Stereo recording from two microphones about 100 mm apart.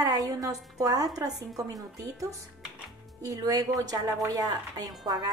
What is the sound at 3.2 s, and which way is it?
A woman's voice, 35° right (ahead or behind).